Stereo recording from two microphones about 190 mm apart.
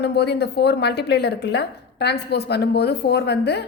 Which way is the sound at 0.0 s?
60° left (ahead or behind).